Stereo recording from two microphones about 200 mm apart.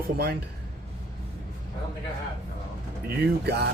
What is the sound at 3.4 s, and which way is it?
Speech, 55° right (ahead or behind).